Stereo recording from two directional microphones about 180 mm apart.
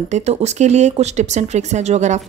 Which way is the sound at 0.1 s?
40° right (ahead or behind).